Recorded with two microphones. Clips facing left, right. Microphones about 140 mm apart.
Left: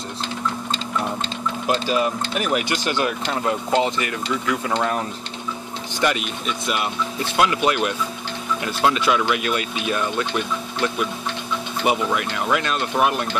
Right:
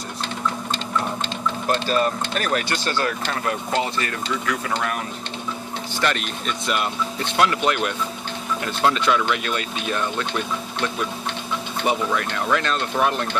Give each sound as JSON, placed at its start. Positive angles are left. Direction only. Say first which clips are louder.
{"t": 1.9, "sound": "speech", "louder": "even", "side_deg": 10}
{"t": 5.9, "sound": "speech", "louder": "left 2 dB", "side_deg": 10}
{"t": 11.8, "sound": "speech", "louder": "left 1 dB", "side_deg": 10}